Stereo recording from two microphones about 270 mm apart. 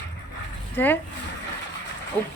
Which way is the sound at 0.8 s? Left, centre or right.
Centre.